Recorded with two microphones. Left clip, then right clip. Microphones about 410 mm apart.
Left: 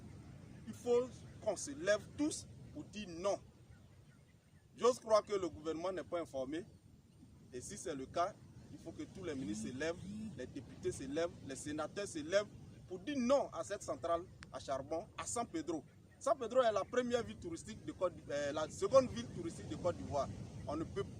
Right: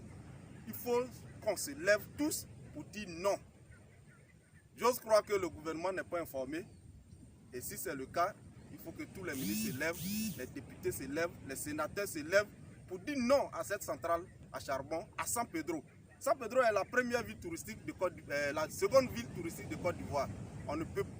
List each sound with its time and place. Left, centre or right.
0.9 s a man's voice: left
4.8 s a man's voice: left